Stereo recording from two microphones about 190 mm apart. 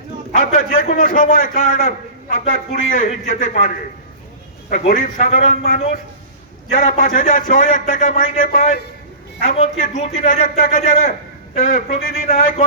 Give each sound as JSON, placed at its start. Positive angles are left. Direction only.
{"t": 0.3, "sound": "a man's voice", "side_deg": 40}
{"t": 4.7, "sound": "a man's voice", "side_deg": 40}